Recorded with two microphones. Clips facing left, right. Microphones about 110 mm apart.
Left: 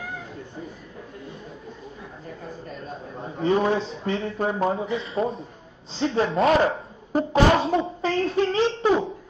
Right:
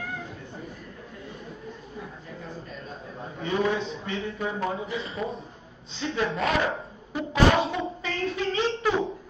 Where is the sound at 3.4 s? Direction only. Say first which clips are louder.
Left 5 dB; 35° left (ahead or behind).